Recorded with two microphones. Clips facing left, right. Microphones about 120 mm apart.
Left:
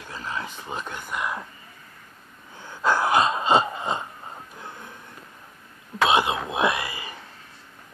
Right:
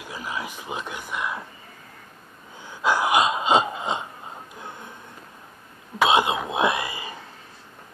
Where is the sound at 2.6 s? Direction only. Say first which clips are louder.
Even; 10° right (ahead or behind).